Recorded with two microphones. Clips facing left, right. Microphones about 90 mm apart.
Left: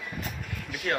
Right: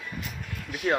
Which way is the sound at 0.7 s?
20° right (ahead or behind).